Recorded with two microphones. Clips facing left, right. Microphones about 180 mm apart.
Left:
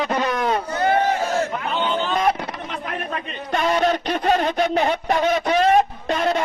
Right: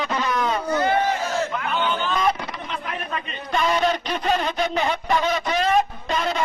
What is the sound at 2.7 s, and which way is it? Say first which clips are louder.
Speech: even; 50° left (ahead or behind).